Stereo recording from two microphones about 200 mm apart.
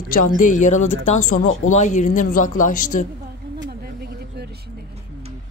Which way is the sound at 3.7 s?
50° right (ahead or behind).